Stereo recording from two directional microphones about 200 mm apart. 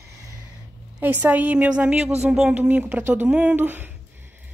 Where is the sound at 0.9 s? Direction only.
10° right (ahead or behind).